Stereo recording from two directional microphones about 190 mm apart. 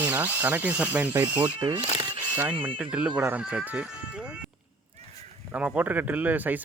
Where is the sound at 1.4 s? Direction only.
20° right (ahead or behind).